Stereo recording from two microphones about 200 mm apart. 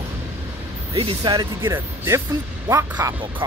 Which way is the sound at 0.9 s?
25° right (ahead or behind).